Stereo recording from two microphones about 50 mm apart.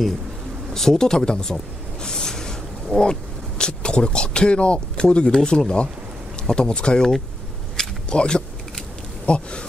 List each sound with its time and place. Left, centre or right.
0.7 s speech: centre
7.7 s a sound: centre
9.2 s speech: left